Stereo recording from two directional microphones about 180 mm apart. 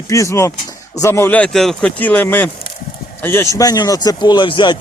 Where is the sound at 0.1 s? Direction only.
15° left (ahead or behind).